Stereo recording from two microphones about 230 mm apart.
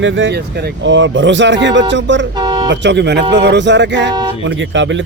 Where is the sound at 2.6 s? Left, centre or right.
Right.